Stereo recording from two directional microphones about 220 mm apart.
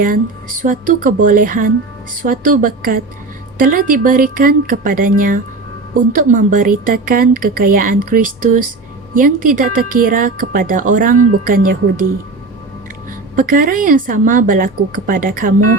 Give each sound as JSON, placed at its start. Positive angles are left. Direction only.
{"t": 0.6, "sound": "a woman's voice", "side_deg": -35}
{"t": 13.3, "sound": "a woman's voice", "side_deg": -35}